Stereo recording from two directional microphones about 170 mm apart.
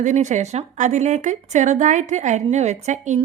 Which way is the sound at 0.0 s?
45° right (ahead or behind).